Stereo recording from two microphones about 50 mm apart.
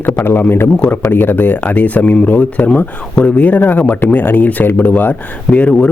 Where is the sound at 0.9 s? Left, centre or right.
Left.